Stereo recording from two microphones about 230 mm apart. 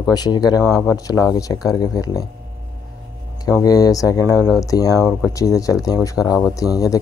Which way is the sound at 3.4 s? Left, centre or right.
Centre.